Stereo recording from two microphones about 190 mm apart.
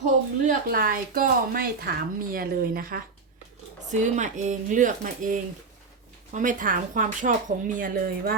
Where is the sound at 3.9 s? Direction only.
40° right (ahead or behind).